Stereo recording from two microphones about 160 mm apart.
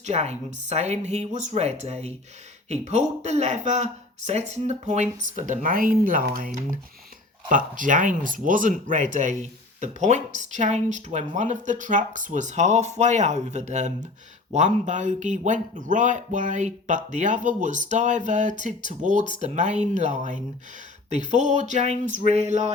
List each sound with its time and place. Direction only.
0.0 s speech: 45° right (ahead or behind)